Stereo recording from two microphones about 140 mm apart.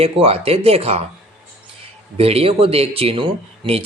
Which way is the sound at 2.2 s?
45° right (ahead or behind).